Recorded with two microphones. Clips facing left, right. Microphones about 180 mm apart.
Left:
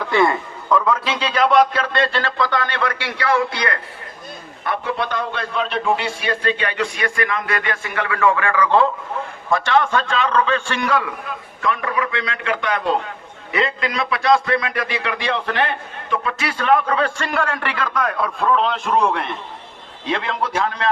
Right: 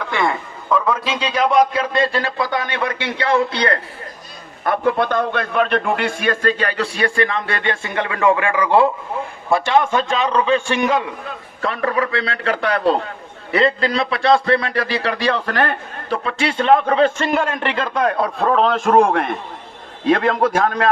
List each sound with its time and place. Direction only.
0.1 s a man's voice: centre (ahead or behind); by 3.8 s 30° right (ahead or behind)
4.6 s a man's voice: 50° right (ahead or behind); by 11.0 s 15° right (ahead or behind)
11.6 s a man's voice: 35° right (ahead or behind)